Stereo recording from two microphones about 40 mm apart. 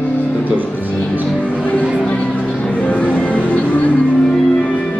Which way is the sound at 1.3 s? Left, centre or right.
Left.